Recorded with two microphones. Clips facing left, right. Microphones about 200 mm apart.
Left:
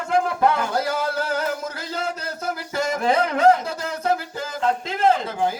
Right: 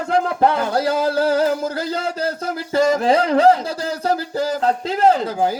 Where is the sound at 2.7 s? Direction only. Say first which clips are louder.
Right 6 dB; 30° right (ahead or behind).